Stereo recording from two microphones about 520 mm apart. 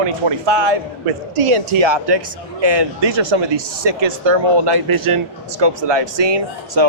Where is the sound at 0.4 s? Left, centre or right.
Right.